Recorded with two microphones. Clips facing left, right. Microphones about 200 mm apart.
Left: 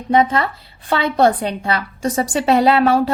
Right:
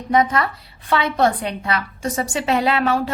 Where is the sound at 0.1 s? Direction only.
25° left (ahead or behind).